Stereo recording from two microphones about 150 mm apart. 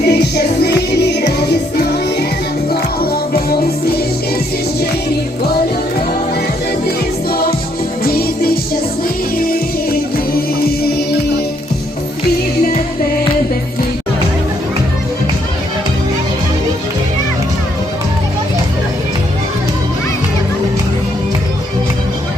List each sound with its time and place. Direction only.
0.0 s music: 90° left
6.8 s music: 90° left